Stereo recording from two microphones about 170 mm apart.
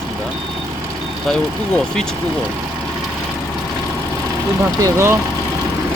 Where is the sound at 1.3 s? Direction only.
5° left (ahead or behind).